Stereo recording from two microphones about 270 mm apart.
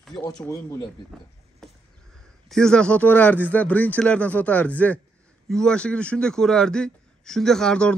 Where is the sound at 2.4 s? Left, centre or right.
Centre.